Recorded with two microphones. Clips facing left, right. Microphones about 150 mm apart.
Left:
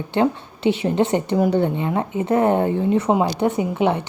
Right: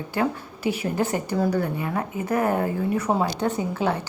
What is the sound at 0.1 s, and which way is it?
A woman's voice, 25° left (ahead or behind).